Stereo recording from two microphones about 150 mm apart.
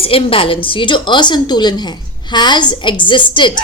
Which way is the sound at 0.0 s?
40° left (ahead or behind).